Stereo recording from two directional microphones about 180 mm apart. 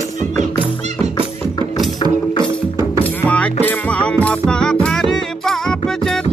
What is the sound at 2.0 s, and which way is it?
Music, 30° left (ahead or behind).